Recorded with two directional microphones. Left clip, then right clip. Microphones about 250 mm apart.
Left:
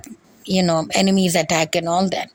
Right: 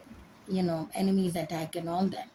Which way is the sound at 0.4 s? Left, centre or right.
Left.